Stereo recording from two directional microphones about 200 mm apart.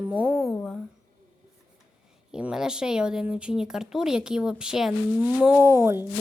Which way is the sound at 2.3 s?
5° right (ahead or behind).